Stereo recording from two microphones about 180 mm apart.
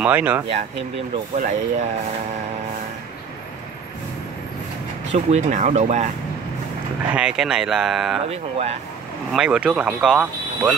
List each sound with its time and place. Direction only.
0.0 s speech: 10° right (ahead or behind)
1.3 s speech: 40° right (ahead or behind)
5.1 s speech: 40° right (ahead or behind)
7.2 s speech: 5° right (ahead or behind)
8.3 s speech: 35° right (ahead or behind)
9.3 s speech: 5° right (ahead or behind)